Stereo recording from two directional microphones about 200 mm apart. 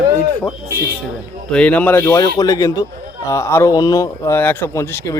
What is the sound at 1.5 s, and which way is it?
Speech, 5° left (ahead or behind).